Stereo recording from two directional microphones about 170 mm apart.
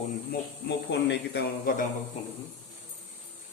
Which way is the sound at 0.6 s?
90° left.